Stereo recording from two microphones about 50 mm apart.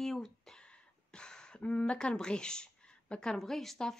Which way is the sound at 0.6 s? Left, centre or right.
Centre.